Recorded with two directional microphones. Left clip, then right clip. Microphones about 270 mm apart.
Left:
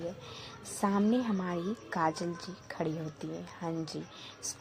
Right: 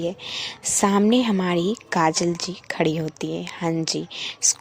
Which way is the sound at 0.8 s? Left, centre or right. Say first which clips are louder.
Right 11 dB; right.